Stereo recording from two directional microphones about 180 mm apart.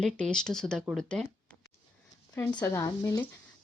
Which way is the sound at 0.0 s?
5° left (ahead or behind).